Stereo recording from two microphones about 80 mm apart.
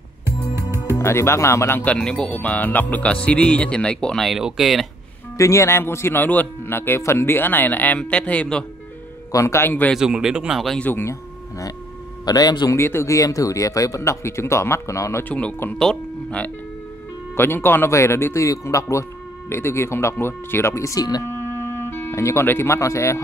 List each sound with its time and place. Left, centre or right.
0.9 s speech: left
2.0 s speech: centre
4.4 s speech: centre
5.4 s a man's voice: left; by 8.6 s centre
9.3 s speech: left
9.9 s speech: centre
10.8 s a man's voice: left
11.1 s a sound: left
12.3 s a man's voice: left
12.7 s speech: left
15.2 s speech: centre
17.4 s speech: left
21.2 s music: left